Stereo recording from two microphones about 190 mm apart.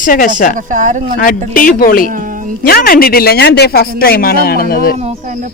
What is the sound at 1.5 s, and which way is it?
Speech, 45° left (ahead or behind).